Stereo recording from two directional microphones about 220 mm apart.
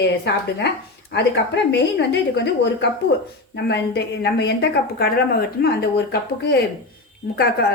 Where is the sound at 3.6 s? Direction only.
50° left (ahead or behind).